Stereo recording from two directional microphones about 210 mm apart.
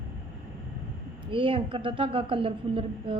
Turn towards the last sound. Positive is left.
turn(degrees=-25)  # may be behind; listen again after turning